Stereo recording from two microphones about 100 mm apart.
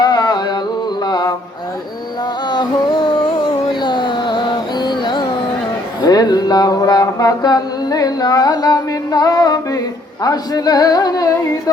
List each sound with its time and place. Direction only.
0.0 s carnatic music: 45° left (ahead or behind)
1.0 s mantra: 40° left (ahead or behind)
2.5 s music: 45° left (ahead or behind)
6.0 s mantra: 40° left (ahead or behind)
10.2 s a sound: 40° left (ahead or behind)